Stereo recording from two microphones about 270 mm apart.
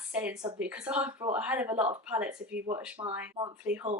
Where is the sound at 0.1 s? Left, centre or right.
Centre.